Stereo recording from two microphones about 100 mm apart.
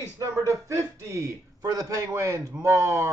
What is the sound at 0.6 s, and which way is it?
Speech, 30° right (ahead or behind).